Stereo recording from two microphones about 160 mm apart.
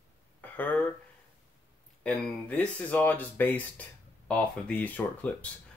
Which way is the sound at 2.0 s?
5° left (ahead or behind).